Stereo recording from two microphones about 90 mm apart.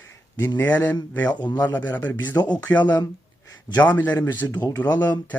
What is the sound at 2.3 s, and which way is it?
Speech, 50° left (ahead or behind).